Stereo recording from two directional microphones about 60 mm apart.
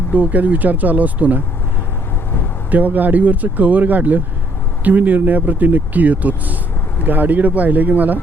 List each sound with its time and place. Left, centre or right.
0.1 s speech: right
2.6 s speech: right